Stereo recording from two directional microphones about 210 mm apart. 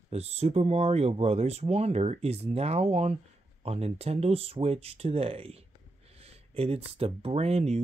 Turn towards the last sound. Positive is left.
turn(degrees=-30)  # may be behind; listen again after turning